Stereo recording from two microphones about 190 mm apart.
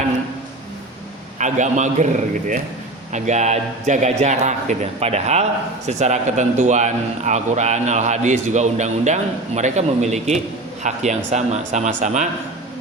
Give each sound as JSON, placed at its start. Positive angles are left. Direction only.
{"t": 1.4, "sound": "a man's voice", "side_deg": -40}
{"t": 3.1, "sound": "a man's voice", "side_deg": -40}